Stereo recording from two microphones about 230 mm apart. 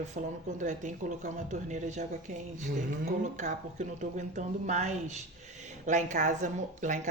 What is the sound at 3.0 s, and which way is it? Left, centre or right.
Speech, right.